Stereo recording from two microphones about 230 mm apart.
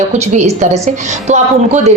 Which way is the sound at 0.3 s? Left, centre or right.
Right.